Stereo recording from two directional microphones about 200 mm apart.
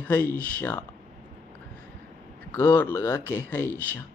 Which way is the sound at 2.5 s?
10° left (ahead or behind).